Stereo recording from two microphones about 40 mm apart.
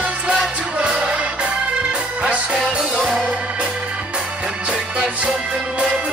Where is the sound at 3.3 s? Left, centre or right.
Right.